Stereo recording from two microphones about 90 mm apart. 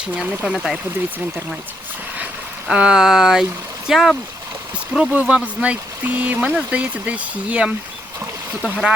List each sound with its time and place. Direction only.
0.5 s speech: centre (ahead or behind)
2.6 s speech: 10° right (ahead or behind)
4.9 s speech: 10° right (ahead or behind)